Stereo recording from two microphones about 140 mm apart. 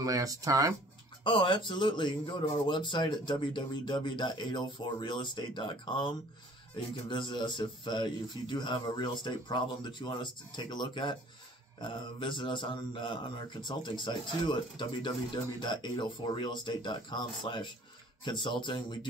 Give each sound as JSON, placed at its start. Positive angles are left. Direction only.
{"t": 0.0, "sound": "speech", "side_deg": -25}
{"t": 1.2, "sound": "speech", "side_deg": 35}
{"t": 7.1, "sound": "speech", "side_deg": 35}